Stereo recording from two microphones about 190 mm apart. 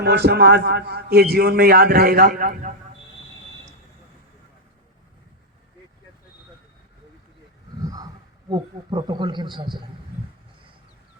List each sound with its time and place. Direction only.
0.0 s a man's voice: 60° right (ahead or behind)
7.9 s a man's voice: 20° right (ahead or behind)